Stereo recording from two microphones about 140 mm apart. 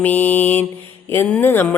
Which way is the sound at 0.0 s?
10° left (ahead or behind).